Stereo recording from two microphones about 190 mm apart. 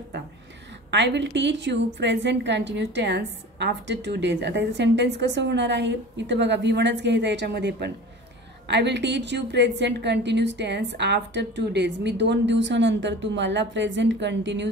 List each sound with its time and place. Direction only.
0.9 s a woman's voice: 65° right (ahead or behind)